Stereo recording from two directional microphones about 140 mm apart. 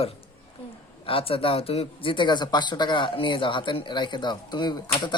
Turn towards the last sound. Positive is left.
turn(degrees=30)  # may be behind; listen again after turning